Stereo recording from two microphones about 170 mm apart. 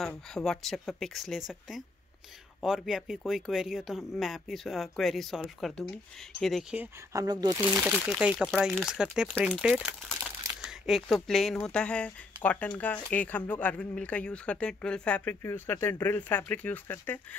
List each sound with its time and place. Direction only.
0.0 s speech: centre (ahead or behind)
2.6 s speech: centre (ahead or behind)
6.8 s speech: 20° right (ahead or behind)
7.7 s speech: 10° right (ahead or behind); by 17.4 s 10° left (ahead or behind)